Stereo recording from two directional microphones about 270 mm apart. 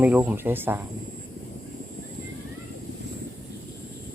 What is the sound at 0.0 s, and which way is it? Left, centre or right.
Speech, centre.